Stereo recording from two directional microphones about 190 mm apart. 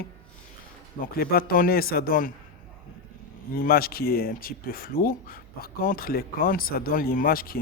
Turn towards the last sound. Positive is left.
turn(degrees=50)  # may be behind; listen again after turning